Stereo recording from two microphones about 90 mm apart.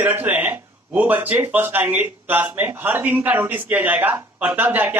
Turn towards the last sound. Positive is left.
turn(degrees=-20)  # may be behind; listen again after turning